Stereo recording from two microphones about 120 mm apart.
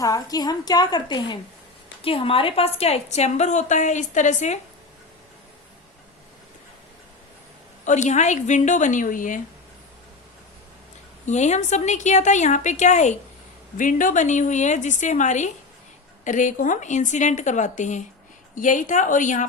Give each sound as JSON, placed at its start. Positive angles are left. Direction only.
{"t": 0.0, "sound": "a woman's voice", "side_deg": 30}
{"t": 2.0, "sound": "a woman's voice", "side_deg": 50}
{"t": 7.9, "sound": "a woman's voice", "side_deg": 90}
{"t": 11.3, "sound": "a woman's voice", "side_deg": 75}